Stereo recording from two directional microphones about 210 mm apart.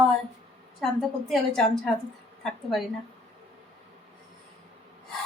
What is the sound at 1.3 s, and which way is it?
A woman's voice, centre (ahead or behind).